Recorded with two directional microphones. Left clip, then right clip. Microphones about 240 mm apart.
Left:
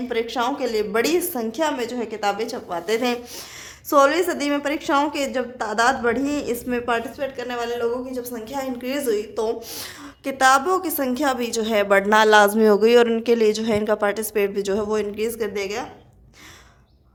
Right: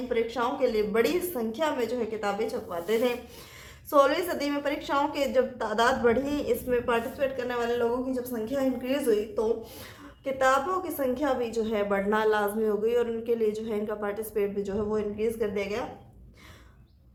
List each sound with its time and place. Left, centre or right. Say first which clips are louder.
0.1 s a woman's voice: left 4 dB; left